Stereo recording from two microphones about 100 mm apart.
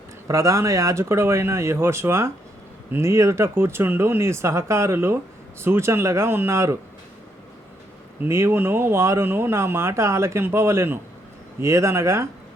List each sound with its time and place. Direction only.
0.3 s speech: 30° right (ahead or behind)
8.2 s speech: 25° right (ahead or behind)